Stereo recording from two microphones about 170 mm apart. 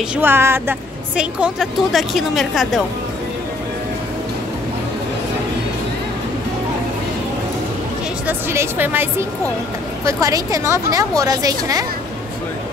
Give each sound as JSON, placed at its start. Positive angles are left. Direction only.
{"t": 0.1, "sound": "a woman's voice", "side_deg": -10}
{"t": 8.3, "sound": "a woman's voice", "side_deg": -15}